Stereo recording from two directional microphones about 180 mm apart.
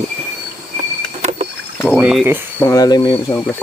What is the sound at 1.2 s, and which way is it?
Rowboat, 35° right (ahead or behind).